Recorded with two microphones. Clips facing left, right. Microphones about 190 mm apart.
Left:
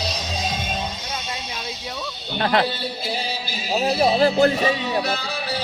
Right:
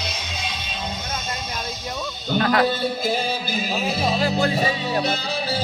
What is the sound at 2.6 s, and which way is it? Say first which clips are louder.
Music: right 5 dB; 45° right (ahead or behind).